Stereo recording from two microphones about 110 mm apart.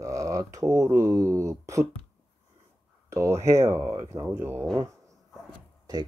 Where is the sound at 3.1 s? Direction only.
25° right (ahead or behind).